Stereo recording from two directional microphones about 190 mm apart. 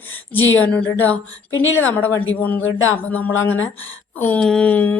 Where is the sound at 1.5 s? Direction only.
90° left.